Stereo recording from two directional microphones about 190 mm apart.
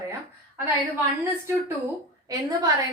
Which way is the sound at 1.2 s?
15° right (ahead or behind).